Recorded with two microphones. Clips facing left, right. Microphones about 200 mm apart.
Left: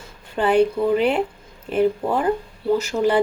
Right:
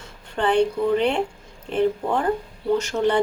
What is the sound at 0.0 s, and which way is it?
A woman's voice, 5° left (ahead or behind).